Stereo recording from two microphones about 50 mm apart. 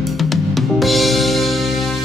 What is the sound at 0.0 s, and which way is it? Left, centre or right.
Music, centre.